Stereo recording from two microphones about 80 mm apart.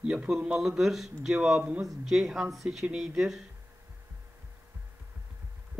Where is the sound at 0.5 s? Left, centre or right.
Centre.